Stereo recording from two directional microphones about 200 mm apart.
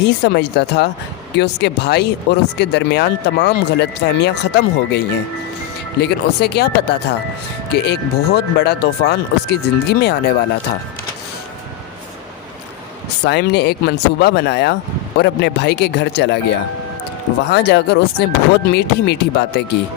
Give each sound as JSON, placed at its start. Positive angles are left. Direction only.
{"t": 0.0, "sound": "speech", "side_deg": 60}
{"t": 13.2, "sound": "speech", "side_deg": 55}